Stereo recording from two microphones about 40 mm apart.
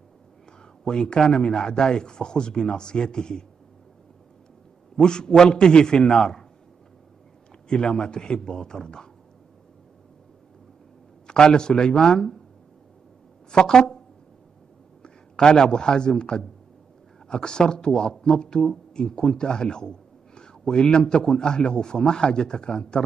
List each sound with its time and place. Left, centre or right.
0.8 s speech: centre
4.9 s speech: left
7.6 s speech: centre
11.2 s speech: centre
13.5 s speech: centre
15.0 s a man's voice: centre